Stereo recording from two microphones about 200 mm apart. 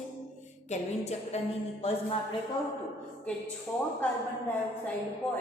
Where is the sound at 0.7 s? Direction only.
35° left (ahead or behind).